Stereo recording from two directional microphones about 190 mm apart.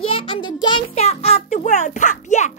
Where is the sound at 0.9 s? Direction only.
35° left (ahead or behind).